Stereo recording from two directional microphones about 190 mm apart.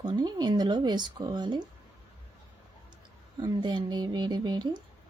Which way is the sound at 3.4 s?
25° right (ahead or behind).